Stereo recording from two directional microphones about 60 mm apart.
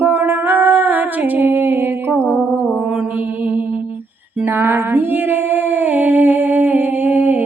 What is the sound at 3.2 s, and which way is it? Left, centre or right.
Mantra, right.